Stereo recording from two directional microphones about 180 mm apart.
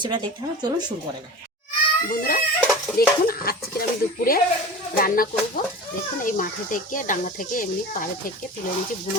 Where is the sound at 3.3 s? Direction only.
55° left (ahead or behind).